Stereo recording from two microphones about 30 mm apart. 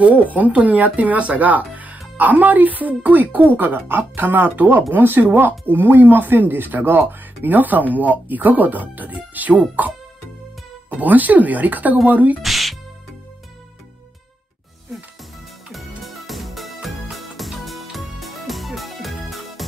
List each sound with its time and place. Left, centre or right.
0.1 s speech: right
4.6 s speech: right
4.9 s speech: right
7.9 s speech: right
12.4 s music: centre
16.0 s music: centre